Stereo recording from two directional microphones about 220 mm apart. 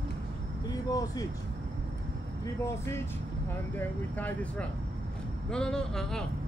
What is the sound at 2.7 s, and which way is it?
Speech, 10° left (ahead or behind).